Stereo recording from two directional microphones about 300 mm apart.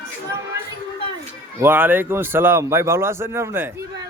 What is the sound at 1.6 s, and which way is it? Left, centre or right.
Speech, centre.